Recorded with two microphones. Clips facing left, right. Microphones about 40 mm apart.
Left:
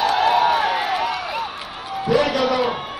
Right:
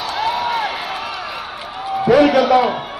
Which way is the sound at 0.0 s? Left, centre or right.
Left.